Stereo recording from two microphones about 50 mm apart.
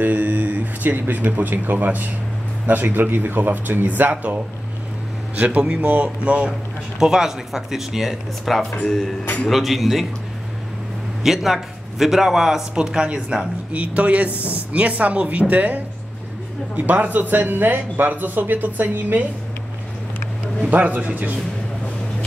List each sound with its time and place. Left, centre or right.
0.0 s a sound: right
0.9 s speech: right
5.6 s speech: centre
7.0 s speech: centre
11.2 s speech: centre; by 19.2 s right
20.7 s speech: right